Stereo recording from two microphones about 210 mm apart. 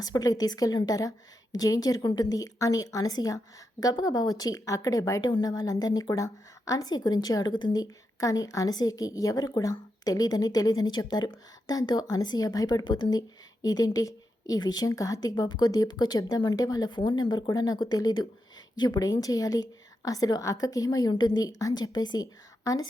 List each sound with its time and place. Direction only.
0.0 s a woman's voice: 15° left (ahead or behind)